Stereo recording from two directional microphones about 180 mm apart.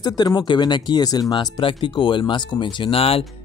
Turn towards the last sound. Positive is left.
turn(degrees=30)  # may be behind; listen again after turning